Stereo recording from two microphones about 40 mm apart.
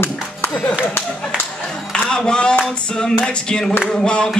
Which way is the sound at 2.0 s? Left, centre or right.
Centre.